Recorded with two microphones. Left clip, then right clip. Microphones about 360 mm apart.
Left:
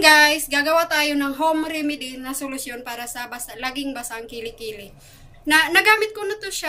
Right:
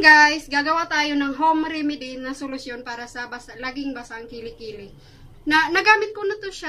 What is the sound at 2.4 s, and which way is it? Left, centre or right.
A woman's voice, left.